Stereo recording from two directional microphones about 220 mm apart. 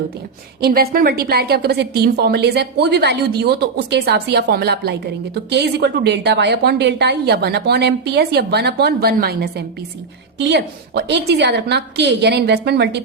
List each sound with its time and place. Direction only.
0.6 s a woman's voice: 40° right (ahead or behind)